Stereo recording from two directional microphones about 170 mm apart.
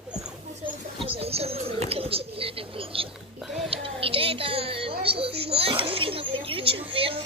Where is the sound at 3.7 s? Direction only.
35° right (ahead or behind).